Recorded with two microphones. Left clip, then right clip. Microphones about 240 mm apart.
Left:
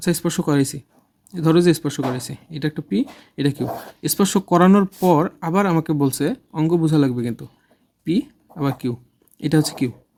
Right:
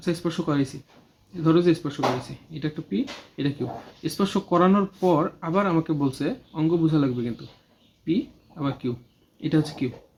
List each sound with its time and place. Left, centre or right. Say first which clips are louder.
0.0 s speech: left 5 dB; left